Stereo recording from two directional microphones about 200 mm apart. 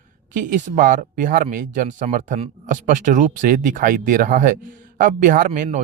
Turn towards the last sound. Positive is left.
turn(degrees=-40)  # may be behind; listen again after turning